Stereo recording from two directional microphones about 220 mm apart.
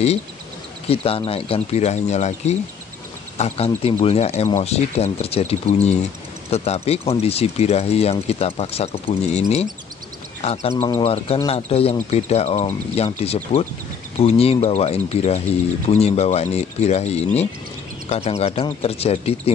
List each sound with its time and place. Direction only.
0.8 s speech: 25° left (ahead or behind)